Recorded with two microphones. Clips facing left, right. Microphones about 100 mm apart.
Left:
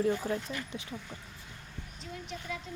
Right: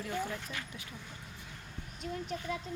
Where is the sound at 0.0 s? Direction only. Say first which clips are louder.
Left 7 dB; 35° left (ahead or behind).